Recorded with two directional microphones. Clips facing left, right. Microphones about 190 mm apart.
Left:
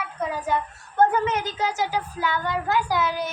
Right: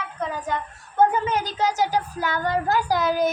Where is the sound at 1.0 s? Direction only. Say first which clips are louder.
Even; 20° right (ahead or behind).